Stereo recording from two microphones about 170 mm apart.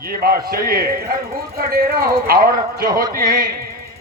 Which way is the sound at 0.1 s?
60° right (ahead or behind).